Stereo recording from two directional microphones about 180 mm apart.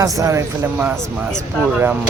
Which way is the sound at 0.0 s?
15° right (ahead or behind).